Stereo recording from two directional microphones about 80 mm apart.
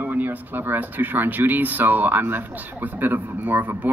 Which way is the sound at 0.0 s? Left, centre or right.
Right.